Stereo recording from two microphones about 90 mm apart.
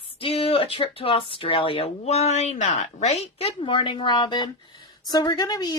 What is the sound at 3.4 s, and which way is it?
A woman's voice, 85° left.